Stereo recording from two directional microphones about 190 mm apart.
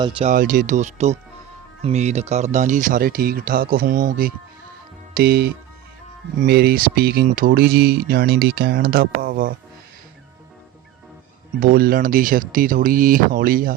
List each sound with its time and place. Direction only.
0.3 s speech: 45° right (ahead or behind)
11.6 s speech: 50° right (ahead or behind)